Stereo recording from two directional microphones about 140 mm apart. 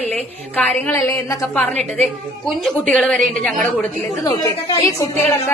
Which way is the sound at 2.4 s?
5° left (ahead or behind).